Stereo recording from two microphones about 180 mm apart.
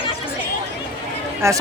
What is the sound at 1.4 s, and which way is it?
Speech, 15° right (ahead or behind).